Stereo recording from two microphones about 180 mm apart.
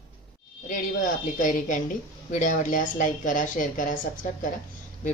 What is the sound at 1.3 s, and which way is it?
A woman's voice, 45° left (ahead or behind).